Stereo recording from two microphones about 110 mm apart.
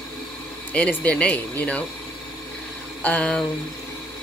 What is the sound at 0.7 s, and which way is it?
Speech, 10° left (ahead or behind).